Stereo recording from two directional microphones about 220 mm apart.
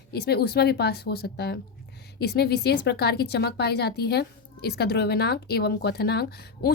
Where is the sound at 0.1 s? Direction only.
45° left (ahead or behind).